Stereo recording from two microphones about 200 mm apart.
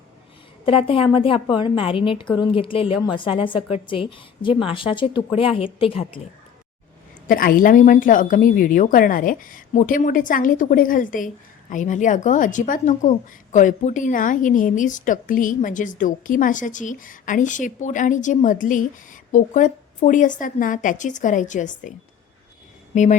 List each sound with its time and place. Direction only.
0.6 s a woman's voice: 25° left (ahead or behind)
7.3 s a woman's voice: 45° left (ahead or behind)